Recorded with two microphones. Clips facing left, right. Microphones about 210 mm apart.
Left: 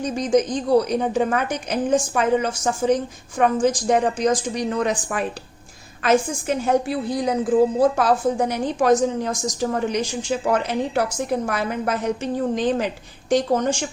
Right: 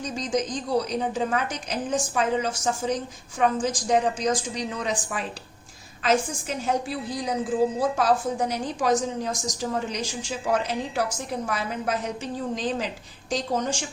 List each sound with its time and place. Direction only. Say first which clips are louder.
0.0 s a woman's voice: left 7 dB; 55° left (ahead or behind)